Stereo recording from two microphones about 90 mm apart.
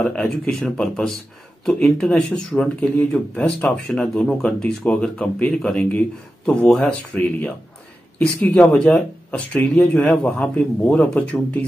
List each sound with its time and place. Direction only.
0.0 s speech: 5° left (ahead or behind)